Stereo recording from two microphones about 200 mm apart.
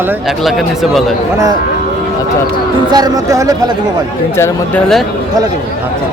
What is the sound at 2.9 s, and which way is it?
Speech, 20° right (ahead or behind).